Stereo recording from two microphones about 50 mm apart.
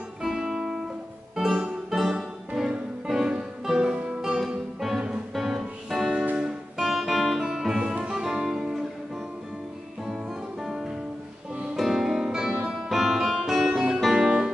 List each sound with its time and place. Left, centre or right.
0.2 s music: centre
10.6 s music: centre